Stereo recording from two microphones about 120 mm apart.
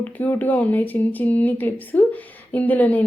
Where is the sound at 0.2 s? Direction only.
15° left (ahead or behind).